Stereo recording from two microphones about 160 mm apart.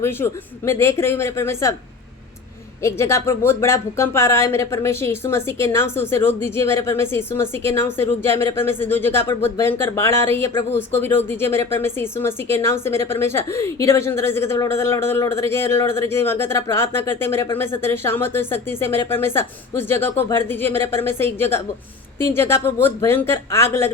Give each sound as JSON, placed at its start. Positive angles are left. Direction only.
{"t": 0.0, "sound": "speech", "side_deg": 15}
{"t": 2.8, "sound": "speech", "side_deg": 15}